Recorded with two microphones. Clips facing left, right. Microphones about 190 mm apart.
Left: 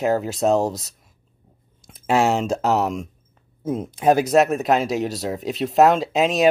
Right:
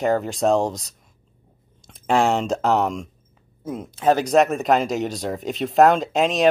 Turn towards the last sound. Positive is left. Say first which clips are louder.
# left 1 dB
turn(degrees=5)  # may be behind; listen again after turning